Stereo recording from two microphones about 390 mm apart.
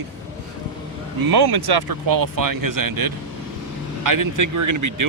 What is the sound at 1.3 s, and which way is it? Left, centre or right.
Speech, right.